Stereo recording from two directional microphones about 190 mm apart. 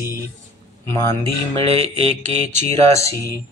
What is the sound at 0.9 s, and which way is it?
Mantra, 15° left (ahead or behind).